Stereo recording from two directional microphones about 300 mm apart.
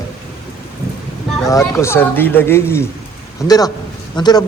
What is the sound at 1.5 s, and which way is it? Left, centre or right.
Speech, centre.